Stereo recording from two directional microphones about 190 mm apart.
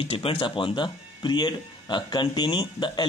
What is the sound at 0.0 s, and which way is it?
Speech, 30° left (ahead or behind).